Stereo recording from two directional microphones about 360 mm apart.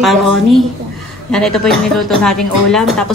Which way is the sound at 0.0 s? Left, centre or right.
Centre.